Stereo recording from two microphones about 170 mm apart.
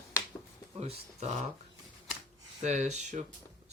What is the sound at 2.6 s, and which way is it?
Speech, 45° right (ahead or behind).